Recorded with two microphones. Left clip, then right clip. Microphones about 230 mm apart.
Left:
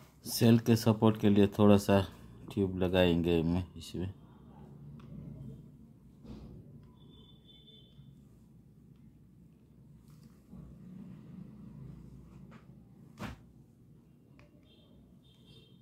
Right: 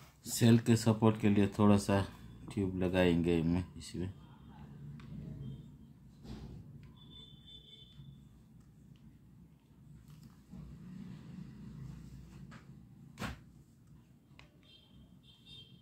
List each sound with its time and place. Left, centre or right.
0.2 s speech: centre